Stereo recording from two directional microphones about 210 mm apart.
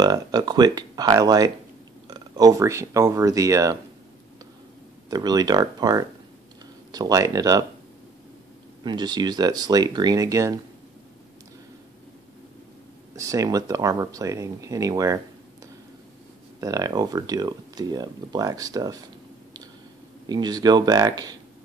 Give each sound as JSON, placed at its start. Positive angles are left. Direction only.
{"t": 0.0, "sound": "speech", "side_deg": -20}
{"t": 5.1, "sound": "speech", "side_deg": -20}
{"t": 8.8, "sound": "speech", "side_deg": -20}
{"t": 13.1, "sound": "speech", "side_deg": -15}
{"t": 16.5, "sound": "speech", "side_deg": -15}
{"t": 20.2, "sound": "speech", "side_deg": -20}